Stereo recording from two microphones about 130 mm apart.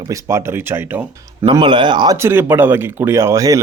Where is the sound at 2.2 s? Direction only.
15° right (ahead or behind).